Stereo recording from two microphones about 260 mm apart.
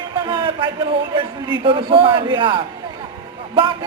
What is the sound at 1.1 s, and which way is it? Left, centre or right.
A man's voice, centre.